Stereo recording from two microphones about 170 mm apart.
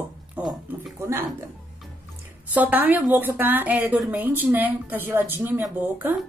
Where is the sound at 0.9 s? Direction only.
15° right (ahead or behind).